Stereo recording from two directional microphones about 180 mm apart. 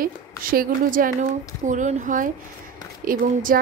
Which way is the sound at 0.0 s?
50° right (ahead or behind).